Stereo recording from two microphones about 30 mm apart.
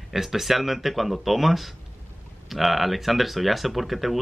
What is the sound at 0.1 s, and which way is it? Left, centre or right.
Speech, centre.